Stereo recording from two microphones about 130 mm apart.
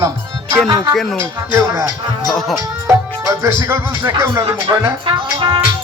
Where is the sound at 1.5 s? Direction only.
25° right (ahead or behind).